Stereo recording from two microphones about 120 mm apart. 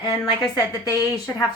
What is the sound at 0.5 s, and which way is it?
Speech, 30° left (ahead or behind).